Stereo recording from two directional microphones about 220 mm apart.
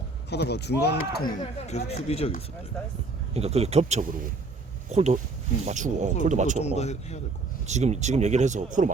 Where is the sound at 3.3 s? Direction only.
30° right (ahead or behind).